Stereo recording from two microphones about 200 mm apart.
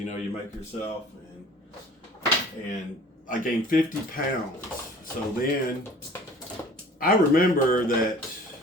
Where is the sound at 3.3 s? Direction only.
45° left (ahead or behind).